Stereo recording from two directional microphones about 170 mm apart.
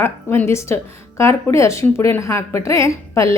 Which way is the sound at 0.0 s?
15° left (ahead or behind).